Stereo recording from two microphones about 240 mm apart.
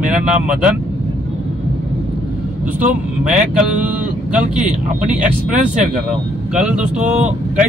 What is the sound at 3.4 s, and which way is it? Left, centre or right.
Speech, centre.